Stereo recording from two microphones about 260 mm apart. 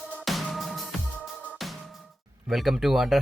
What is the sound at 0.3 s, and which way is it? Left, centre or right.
Music, centre.